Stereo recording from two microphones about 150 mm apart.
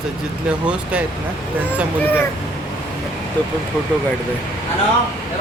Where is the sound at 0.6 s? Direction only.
10° right (ahead or behind).